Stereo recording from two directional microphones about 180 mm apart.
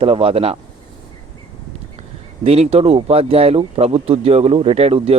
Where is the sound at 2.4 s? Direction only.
35° right (ahead or behind).